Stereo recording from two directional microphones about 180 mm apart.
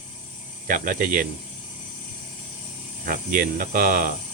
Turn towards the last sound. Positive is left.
turn(degrees=-50)  # may be behind; listen again after turning